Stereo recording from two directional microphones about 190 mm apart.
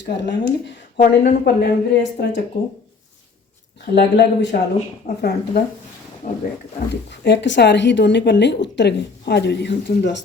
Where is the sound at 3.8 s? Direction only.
60° left (ahead or behind).